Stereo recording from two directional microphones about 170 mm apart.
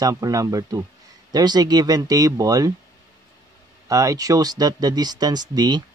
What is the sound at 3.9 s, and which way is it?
Speech, 20° right (ahead or behind).